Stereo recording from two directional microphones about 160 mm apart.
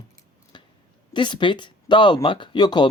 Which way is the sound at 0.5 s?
30° left (ahead or behind).